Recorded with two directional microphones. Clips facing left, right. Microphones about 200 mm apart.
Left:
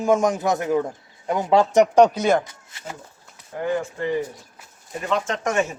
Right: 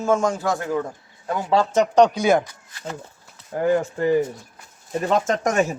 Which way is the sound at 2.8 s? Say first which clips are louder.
Right 4 dB; 10° left (ahead or behind).